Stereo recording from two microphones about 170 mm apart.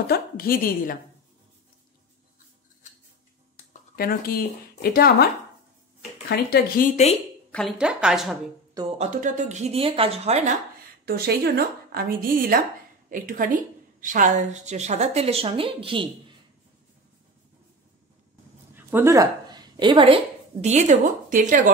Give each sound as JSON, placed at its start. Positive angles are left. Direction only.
{"t": 0.0, "sound": "a woman's voice", "side_deg": 65}
{"t": 3.9, "sound": "speech", "side_deg": 60}
{"t": 6.2, "sound": "speech", "side_deg": 65}
{"t": 7.5, "sound": "a woman's voice", "side_deg": 0}
{"t": 8.9, "sound": "a woman's voice", "side_deg": -45}
{"t": 11.1, "sound": "a woman's voice", "side_deg": -70}
{"t": 18.8, "sound": "a woman's voice", "side_deg": -10}
{"t": 20.6, "sound": "speech", "side_deg": -45}